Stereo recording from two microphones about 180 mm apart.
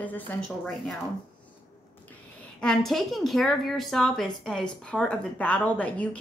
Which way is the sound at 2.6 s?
5° left (ahead or behind).